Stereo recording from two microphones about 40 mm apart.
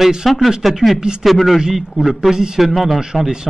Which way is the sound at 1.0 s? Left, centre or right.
Centre.